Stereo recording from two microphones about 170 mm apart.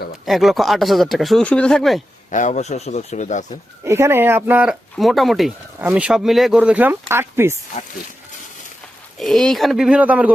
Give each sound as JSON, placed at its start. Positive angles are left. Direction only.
{"t": 0.3, "sound": "speech", "side_deg": 0}
{"t": 2.3, "sound": "speech", "side_deg": 45}
{"t": 3.8, "sound": "speech", "side_deg": -15}
{"t": 9.1, "sound": "speech", "side_deg": 0}